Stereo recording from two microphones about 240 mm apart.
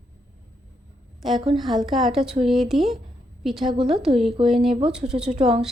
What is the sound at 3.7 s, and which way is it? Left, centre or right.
Speech, right.